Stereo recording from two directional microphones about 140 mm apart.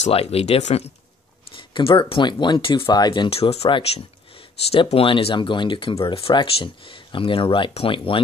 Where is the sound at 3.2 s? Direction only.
45° left (ahead or behind).